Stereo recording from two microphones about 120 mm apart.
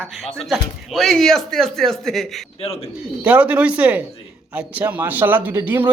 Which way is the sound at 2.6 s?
55° left (ahead or behind).